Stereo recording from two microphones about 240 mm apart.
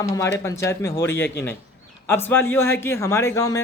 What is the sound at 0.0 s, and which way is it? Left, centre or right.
Speech, centre.